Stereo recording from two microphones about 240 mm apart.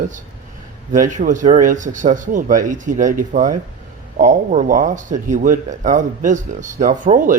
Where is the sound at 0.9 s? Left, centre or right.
Right.